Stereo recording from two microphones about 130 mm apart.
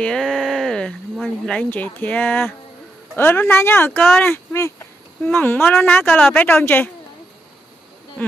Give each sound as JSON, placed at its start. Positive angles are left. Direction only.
{"t": 0.0, "sound": "speech", "side_deg": 5}
{"t": 4.0, "sound": "speech", "side_deg": 5}
{"t": 4.3, "sound": "speech", "side_deg": 20}